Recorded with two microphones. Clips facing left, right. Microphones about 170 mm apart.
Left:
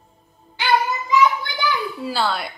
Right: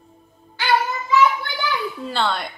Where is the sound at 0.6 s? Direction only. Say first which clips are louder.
Left 1 dB; 15° left (ahead or behind).